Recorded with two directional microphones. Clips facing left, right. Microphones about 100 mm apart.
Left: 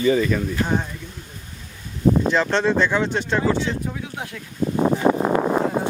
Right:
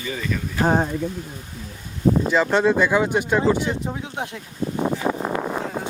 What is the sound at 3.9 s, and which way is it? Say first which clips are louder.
Speech: right 2 dB; 25° right (ahead or behind).